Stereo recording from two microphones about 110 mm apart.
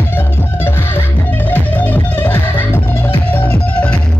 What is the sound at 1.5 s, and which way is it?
Music, 15° left (ahead or behind).